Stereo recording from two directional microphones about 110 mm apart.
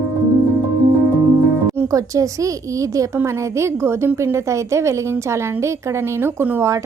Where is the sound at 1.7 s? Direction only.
30° right (ahead or behind).